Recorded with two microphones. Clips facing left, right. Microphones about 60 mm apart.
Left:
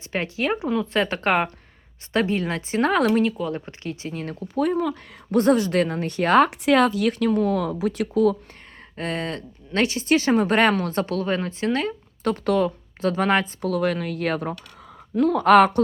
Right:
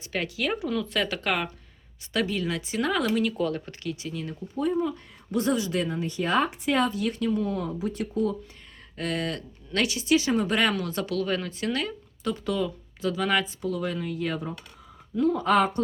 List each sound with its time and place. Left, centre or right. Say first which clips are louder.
0.1 s speech: left 4 dB; left
3.5 s speech: left 2 dB; left
4.4 s speech: left 4 dB; left
5.3 s speech: left 7 dB; left
9.0 s speech: left 2 dB; left
12.2 s speech: left 7 dB; left